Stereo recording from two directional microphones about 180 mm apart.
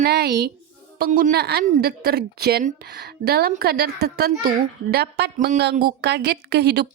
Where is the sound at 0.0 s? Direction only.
65° right (ahead or behind).